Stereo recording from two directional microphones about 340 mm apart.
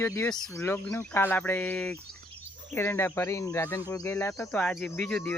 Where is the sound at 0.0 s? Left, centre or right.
Centre.